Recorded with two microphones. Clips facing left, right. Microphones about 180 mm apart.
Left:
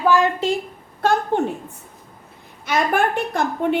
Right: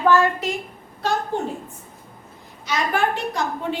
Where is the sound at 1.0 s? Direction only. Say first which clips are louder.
Left 4 dB; 55° left (ahead or behind).